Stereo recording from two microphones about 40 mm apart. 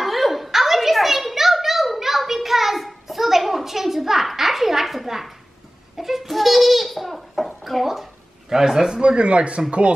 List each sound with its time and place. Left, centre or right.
0.0 s a sound: centre
5.9 s babbling: centre
8.9 s speech: right